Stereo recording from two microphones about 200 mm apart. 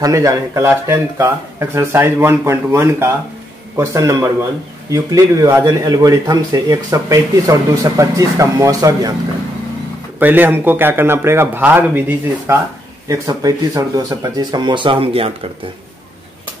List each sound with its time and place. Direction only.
0.0 s speech: 15° right (ahead or behind)
10.1 s speech: 10° right (ahead or behind); by 15.3 s 30° right (ahead or behind)